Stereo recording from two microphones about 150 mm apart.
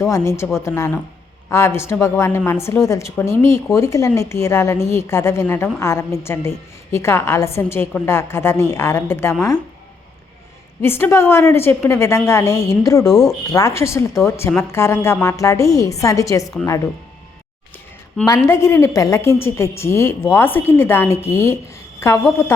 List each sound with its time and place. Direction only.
0.0 s a woman's voice: 20° left (ahead or behind)
10.8 s a woman's voice: 15° left (ahead or behind)
18.4 s a woman's voice: 15° left (ahead or behind)